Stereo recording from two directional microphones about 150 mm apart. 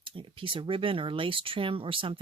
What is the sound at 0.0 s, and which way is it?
Speech, 35° right (ahead or behind).